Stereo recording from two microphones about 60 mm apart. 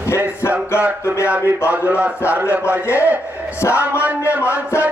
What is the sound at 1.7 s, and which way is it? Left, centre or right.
Speech, right.